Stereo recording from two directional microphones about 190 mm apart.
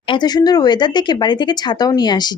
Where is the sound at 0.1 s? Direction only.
20° left (ahead or behind).